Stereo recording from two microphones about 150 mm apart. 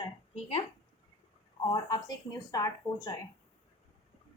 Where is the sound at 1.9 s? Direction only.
25° left (ahead or behind).